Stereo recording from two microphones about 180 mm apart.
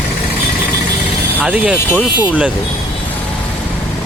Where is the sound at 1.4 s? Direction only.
5° right (ahead or behind).